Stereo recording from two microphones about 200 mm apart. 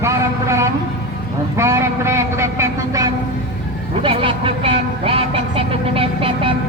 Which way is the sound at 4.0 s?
25° right (ahead or behind).